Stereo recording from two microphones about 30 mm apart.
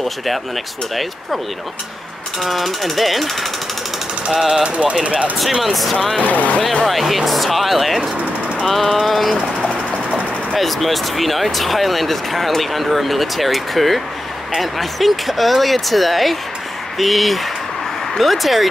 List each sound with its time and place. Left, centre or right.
2.4 s speech: centre
4.3 s speech: centre
4.6 s speech: right
5.6 s speech: centre
6.2 s speech: left
6.9 s speech: centre
10.5 s speech: centre